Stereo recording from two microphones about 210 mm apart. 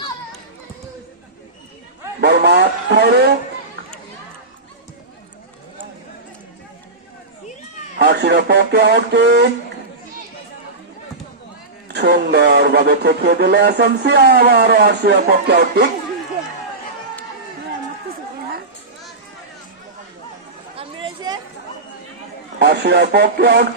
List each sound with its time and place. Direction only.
2.2 s speech: 50° right (ahead or behind)
7.9 s speech: 50° right (ahead or behind)
11.9 s speech: 50° right (ahead or behind)
20.7 s a sound: 20° right (ahead or behind)
22.5 s speech: 50° right (ahead or behind)